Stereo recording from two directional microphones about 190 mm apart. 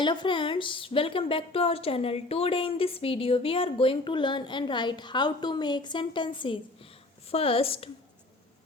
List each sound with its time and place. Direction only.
0.0 s a woman's voice: 25° left (ahead or behind)